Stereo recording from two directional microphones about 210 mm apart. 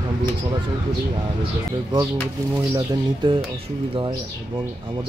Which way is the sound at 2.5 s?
15° right (ahead or behind).